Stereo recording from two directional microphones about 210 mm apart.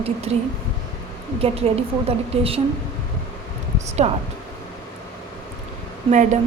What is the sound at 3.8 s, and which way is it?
Speech, 30° right (ahead or behind).